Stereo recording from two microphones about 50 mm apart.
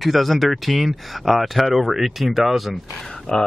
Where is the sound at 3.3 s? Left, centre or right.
Centre.